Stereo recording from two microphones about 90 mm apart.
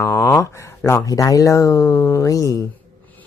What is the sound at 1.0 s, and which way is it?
Speech, 40° left (ahead or behind).